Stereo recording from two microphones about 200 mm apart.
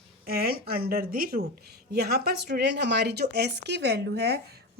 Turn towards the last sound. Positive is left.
turn(degrees=-55)  # may be behind; listen again after turning